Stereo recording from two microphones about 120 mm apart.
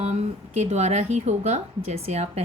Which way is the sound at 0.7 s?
70° right (ahead or behind).